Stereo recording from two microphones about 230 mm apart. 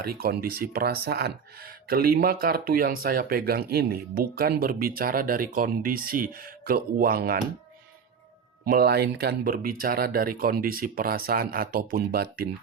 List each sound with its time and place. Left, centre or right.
0.2 s speech: right
8.6 s speech: right